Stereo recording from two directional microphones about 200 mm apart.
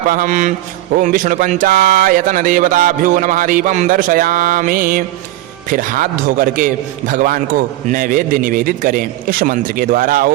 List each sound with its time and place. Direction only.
0.1 s a man's voice: 40° right (ahead or behind)